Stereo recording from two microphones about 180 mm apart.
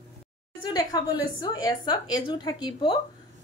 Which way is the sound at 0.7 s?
20° left (ahead or behind).